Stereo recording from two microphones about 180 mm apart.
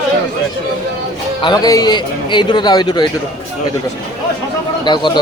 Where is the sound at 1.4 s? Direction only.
20° left (ahead or behind).